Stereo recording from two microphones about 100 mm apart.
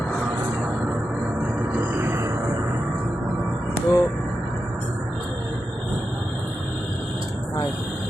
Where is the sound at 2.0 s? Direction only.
25° right (ahead or behind).